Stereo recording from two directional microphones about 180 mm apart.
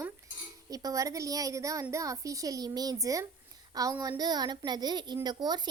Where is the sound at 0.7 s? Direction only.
20° right (ahead or behind).